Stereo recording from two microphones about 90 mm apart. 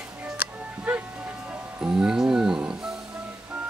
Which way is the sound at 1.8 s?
10° right (ahead or behind).